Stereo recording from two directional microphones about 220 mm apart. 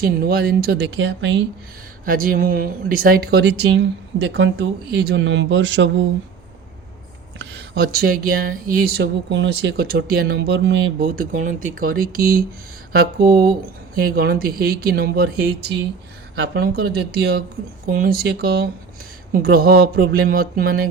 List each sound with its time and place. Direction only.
0.0 s speech: 45° right (ahead or behind)
2.0 s speech: 40° right (ahead or behind); by 6.1 s 55° right (ahead or behind)
7.3 s speech: 50° right (ahead or behind)